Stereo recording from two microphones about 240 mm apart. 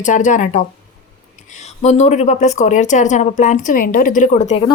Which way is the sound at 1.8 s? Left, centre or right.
Left.